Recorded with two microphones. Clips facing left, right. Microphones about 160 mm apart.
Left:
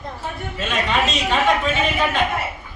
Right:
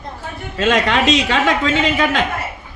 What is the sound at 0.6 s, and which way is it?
A man's voice, 90° right.